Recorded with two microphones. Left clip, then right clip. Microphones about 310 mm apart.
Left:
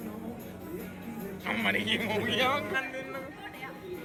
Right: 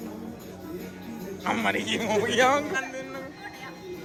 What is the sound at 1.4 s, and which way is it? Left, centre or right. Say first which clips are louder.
Speech: right 3 dB; right.